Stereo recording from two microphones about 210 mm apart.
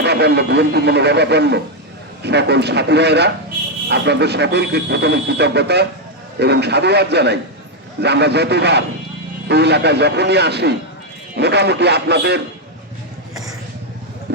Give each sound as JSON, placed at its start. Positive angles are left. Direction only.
{"t": 0.0, "sound": "speech", "side_deg": -50}
{"t": 14.3, "sound": "clip-clop", "side_deg": -50}